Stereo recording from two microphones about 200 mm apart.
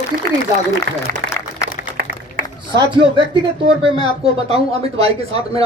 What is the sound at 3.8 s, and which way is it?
Speech, 30° right (ahead or behind).